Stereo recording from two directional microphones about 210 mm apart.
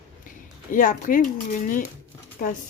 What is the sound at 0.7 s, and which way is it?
Speech, 40° left (ahead or behind).